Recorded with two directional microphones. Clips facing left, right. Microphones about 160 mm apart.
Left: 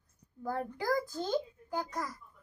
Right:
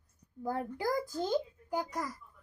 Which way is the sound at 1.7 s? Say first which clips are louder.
Right 1 dB; 10° right (ahead or behind).